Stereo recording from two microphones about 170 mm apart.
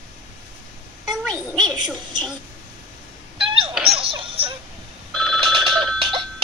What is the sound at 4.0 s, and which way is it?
Music, 35° right (ahead or behind).